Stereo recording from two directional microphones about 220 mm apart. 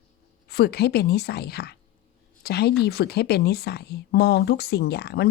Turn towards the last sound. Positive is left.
turn(degrees=45)  # may be behind; listen again after turning